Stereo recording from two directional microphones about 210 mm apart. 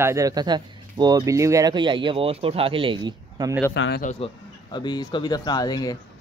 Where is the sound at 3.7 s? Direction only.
55° left (ahead or behind).